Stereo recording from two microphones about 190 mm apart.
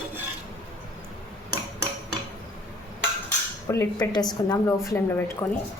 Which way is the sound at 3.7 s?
15° left (ahead or behind).